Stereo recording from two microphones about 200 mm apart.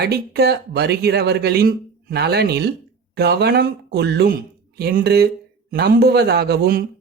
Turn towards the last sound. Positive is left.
turn(degrees=-50)  # may be behind; listen again after turning